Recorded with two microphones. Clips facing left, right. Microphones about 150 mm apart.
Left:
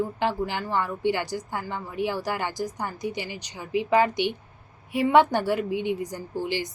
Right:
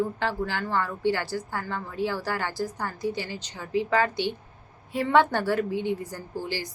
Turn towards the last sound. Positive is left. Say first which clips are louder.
# left 3 dB
turn(degrees=20)  # may be behind; listen again after turning